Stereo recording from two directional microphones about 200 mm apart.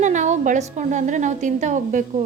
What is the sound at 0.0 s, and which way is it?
A woman's voice, 35° right (ahead or behind).